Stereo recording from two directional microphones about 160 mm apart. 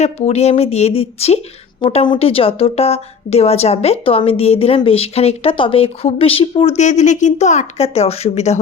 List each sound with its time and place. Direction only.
0.0 s a woman's voice: 45° left (ahead or behind)
6.7 s a woman's voice: 50° left (ahead or behind)